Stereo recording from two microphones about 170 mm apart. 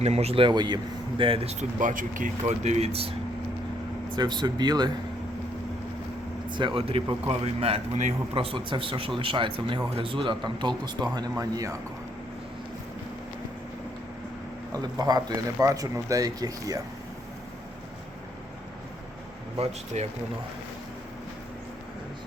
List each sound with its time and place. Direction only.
0.0 s speech: 40° right (ahead or behind)
6.5 s speech: 30° right (ahead or behind)
14.7 s speech: 20° right (ahead or behind)
19.5 s speech: 40° right (ahead or behind)